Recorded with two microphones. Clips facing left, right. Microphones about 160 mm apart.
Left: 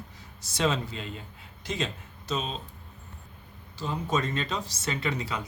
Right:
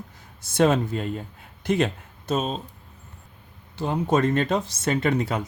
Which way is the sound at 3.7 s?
60° right (ahead or behind).